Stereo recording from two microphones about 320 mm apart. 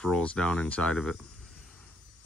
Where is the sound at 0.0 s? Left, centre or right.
Centre.